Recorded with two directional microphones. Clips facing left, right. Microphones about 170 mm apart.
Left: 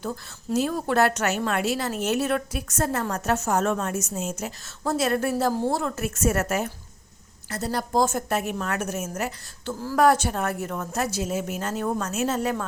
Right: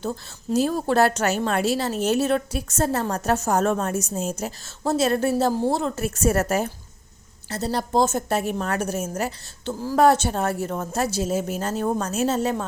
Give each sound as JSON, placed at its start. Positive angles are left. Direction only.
{"t": 0.5, "sound": "a woman's voice", "side_deg": -35}
{"t": 9.6, "sound": "a woman's voice", "side_deg": -20}